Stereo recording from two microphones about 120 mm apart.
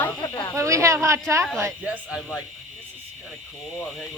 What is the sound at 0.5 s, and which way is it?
Speech, 25° right (ahead or behind).